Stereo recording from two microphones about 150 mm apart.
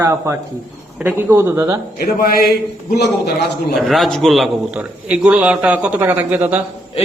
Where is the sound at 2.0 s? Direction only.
85° left.